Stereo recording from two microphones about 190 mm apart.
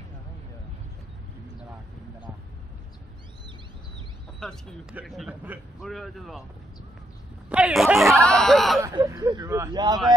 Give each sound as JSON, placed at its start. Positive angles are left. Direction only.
{"t": 4.4, "sound": "a man's voice", "side_deg": 0}
{"t": 7.4, "sound": "a sound", "side_deg": -5}
{"t": 8.8, "sound": "speech", "side_deg": -15}